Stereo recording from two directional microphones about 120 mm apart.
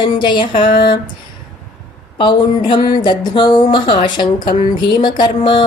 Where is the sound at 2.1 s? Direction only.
40° left (ahead or behind).